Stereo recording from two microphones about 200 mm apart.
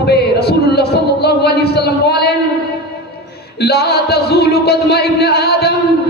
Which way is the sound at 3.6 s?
55° left (ahead or behind).